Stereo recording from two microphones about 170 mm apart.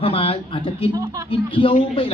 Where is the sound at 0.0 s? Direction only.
35° left (ahead or behind).